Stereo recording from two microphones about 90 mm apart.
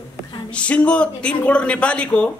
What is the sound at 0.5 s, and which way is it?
Speech, 15° left (ahead or behind).